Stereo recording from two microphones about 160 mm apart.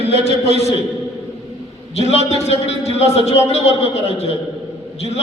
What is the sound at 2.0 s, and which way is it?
A man's voice, 40° left (ahead or behind).